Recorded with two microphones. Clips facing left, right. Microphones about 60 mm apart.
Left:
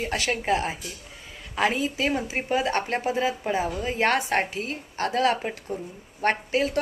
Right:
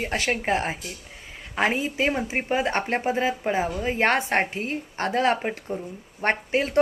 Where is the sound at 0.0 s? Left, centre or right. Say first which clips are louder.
Right 1 dB; right.